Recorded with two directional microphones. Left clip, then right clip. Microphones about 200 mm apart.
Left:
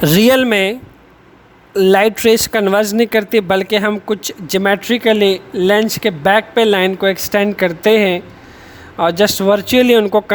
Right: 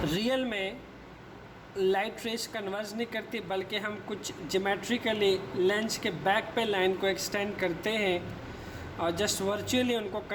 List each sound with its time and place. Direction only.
0.0 s speech: 60° left (ahead or behind)